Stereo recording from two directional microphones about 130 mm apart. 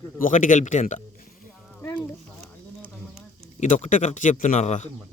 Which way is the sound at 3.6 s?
70° left (ahead or behind).